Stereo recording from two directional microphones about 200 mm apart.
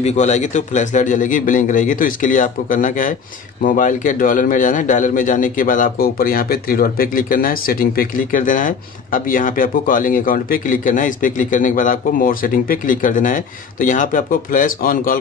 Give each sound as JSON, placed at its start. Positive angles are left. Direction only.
{"t": 0.0, "sound": "a man's voice", "side_deg": 35}